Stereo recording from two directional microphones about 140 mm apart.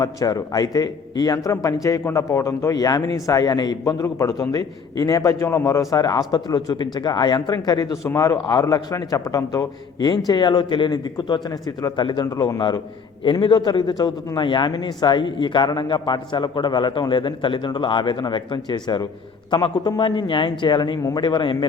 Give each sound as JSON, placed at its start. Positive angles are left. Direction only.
{"t": 0.0, "sound": "a man's voice", "side_deg": 25}